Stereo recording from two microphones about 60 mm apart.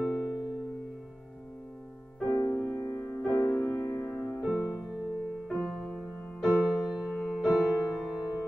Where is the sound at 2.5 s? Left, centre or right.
Left.